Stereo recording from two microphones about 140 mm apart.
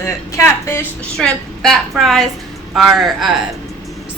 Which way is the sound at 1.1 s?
5° left (ahead or behind).